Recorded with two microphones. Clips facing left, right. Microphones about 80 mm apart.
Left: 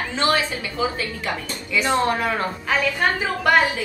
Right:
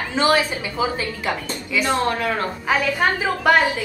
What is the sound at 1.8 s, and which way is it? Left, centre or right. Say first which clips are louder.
Speech: left 1 dB; left.